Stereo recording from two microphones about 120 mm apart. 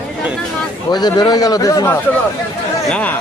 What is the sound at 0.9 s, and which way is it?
Speech, 35° left (ahead or behind).